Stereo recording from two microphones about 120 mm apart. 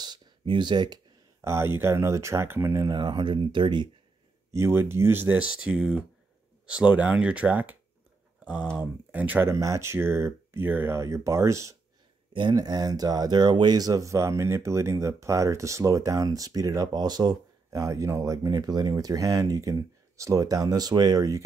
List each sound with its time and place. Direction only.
0.0 s a sound: 40° right (ahead or behind)
1.4 s speech: 20° right (ahead or behind)
2.9 s speech: 40° right (ahead or behind)
4.5 s speech: 20° right (ahead or behind)
8.7 s speech: 15° right (ahead or behind)
12.3 s speech: 40° right (ahead or behind)